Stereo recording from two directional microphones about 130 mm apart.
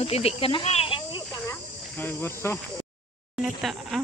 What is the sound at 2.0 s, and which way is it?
Speech, 15° left (ahead or behind).